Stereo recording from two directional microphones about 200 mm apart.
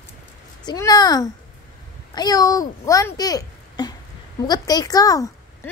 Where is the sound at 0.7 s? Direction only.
20° left (ahead or behind).